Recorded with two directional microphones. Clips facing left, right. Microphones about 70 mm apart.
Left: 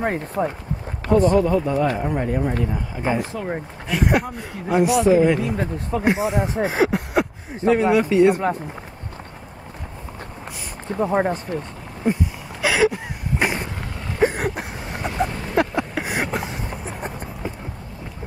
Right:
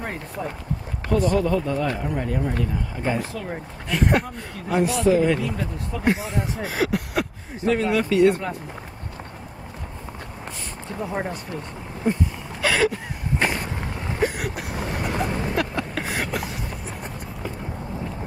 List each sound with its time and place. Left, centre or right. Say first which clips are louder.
0.0 s speech: left 8 dB; left
1.4 s speech: left 3 dB; centre
3.9 s speech: left 1 dB; centre
5.6 s speech: left 5 dB; left
6.0 s speech: left 3 dB; centre
10.9 s speech: left 8 dB; left
12.6 s a sound: left 2 dB; centre
14.2 s vehicle: left 5 dB; left
15.9 s a sound: left 2 dB; centre